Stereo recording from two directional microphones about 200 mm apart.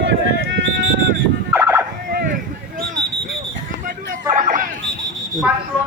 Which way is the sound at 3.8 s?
40° right (ahead or behind).